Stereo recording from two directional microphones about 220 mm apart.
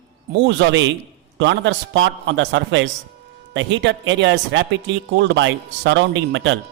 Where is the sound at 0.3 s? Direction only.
55° right (ahead or behind).